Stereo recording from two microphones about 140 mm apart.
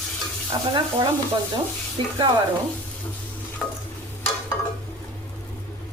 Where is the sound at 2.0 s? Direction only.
40° right (ahead or behind).